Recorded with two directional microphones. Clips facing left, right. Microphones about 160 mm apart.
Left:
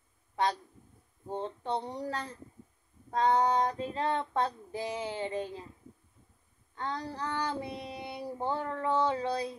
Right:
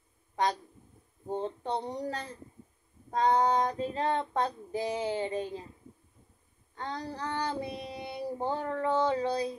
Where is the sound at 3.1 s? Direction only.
40° right (ahead or behind).